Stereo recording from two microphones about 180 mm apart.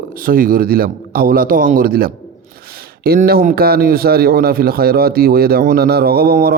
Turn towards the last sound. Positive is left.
turn(degrees=-55)  # may be behind; listen again after turning